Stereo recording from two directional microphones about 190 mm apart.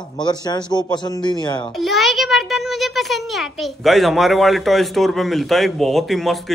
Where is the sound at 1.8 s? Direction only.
Centre (ahead or behind).